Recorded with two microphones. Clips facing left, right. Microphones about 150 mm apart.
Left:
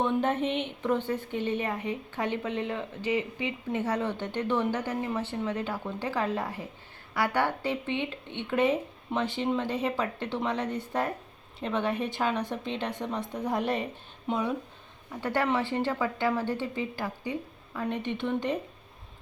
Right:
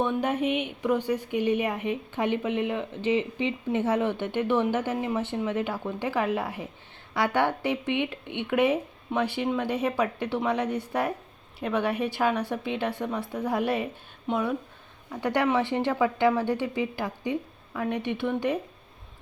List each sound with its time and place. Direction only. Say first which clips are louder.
0.2 s a woman's voice: right 1 dB; 10° right (ahead or behind)
15.2 s a woman's voice: right 3 dB; 20° right (ahead or behind)